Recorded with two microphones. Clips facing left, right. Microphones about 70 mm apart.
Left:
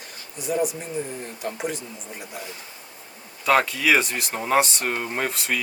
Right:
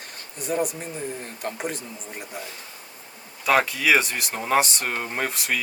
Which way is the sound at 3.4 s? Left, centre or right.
Centre.